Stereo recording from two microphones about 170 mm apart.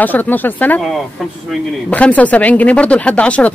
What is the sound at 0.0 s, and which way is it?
Speech, 10° left (ahead or behind).